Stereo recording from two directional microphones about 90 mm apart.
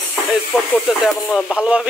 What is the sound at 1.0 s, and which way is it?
Music, centre (ahead or behind).